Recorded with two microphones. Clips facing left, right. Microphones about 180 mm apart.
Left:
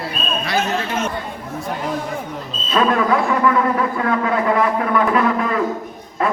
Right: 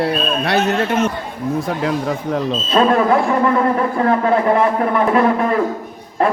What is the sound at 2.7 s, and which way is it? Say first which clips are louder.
A man's voice: right 3 dB; 30° right (ahead or behind).